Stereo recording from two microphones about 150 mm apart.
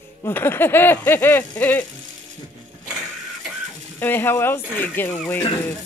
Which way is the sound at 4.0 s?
15° left (ahead or behind).